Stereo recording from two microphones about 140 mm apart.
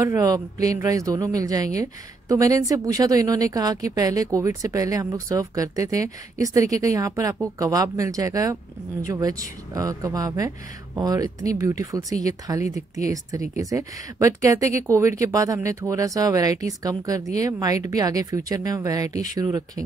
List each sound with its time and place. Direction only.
0.0 s a man's voice: 25° right (ahead or behind)